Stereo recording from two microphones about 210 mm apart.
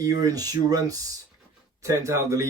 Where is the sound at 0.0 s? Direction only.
15° right (ahead or behind).